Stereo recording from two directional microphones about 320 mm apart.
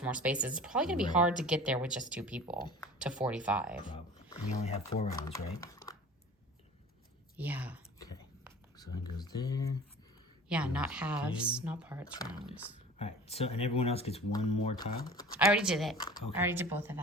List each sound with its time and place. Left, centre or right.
0.0 s speech: centre
3.9 s speech: centre
7.3 s speech: centre
9.0 s speech: centre
10.5 s speech: centre
12.1 s speech: centre
15.4 s speech: centre
16.0 s speech: centre
16.3 s speech: centre